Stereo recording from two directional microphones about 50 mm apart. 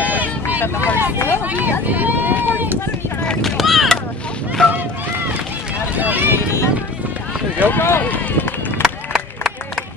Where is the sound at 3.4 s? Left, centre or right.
Centre.